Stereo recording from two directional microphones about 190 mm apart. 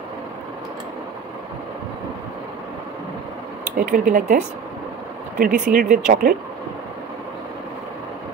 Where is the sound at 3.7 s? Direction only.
45° right (ahead or behind).